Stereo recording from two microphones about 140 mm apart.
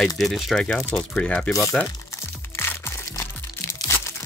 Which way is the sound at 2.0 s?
15° left (ahead or behind).